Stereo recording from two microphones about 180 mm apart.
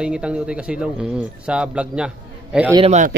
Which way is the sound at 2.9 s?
40° right (ahead or behind).